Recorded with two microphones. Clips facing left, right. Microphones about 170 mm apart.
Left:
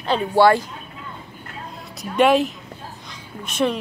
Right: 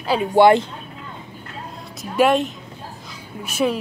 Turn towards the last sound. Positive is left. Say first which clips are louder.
# right 1 dB
turn(degrees=-5)  # may be behind; listen again after turning